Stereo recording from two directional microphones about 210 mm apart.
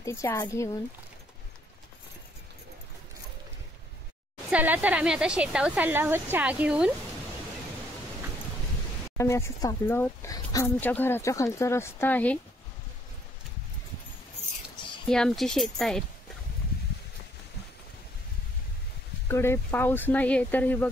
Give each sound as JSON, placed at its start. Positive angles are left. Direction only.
{"t": 0.0, "sound": "speech", "side_deg": 15}
{"t": 4.5, "sound": "speech", "side_deg": -5}
{"t": 9.1, "sound": "speech", "side_deg": 15}
{"t": 14.4, "sound": "a sound", "side_deg": 30}
{"t": 15.0, "sound": "speech", "side_deg": 5}
{"t": 19.2, "sound": "speech", "side_deg": 10}